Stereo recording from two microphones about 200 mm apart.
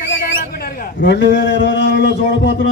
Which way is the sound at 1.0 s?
60° left (ahead or behind).